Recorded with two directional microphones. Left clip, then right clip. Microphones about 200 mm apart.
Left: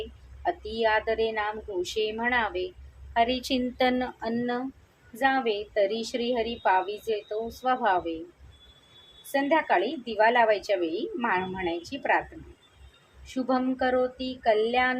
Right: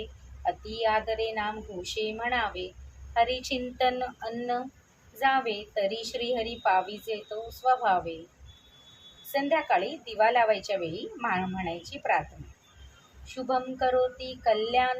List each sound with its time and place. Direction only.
0.4 s a woman's voice: 35° left (ahead or behind)
9.3 s a woman's voice: 35° left (ahead or behind)
13.2 s a woman's voice: 35° left (ahead or behind)